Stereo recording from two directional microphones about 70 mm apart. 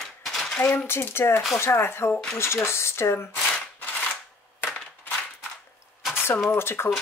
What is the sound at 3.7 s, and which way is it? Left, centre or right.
Cap gun, left.